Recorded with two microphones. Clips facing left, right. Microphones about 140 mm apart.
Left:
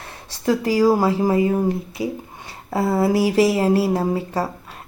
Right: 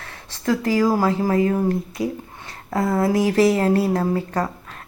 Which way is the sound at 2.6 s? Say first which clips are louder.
Left 1 dB; 5° left (ahead or behind).